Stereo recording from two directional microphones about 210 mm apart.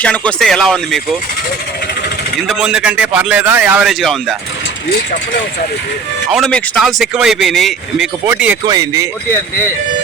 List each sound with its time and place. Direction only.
0.0 s speech: 5° left (ahead or behind)
2.5 s speech: 5° right (ahead or behind)
6.3 s speech: centre (ahead or behind)
8.6 s speech: 20° right (ahead or behind)